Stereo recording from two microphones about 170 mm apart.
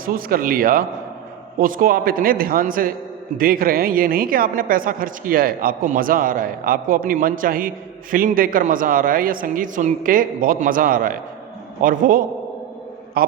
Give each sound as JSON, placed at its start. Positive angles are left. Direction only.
{"t": 0.0, "sound": "a woman's voice", "side_deg": -55}